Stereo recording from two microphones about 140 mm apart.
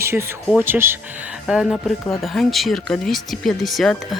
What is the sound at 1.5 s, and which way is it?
Speech, 5° right (ahead or behind).